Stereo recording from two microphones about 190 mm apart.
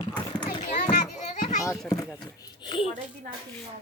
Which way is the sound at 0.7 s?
40° left (ahead or behind).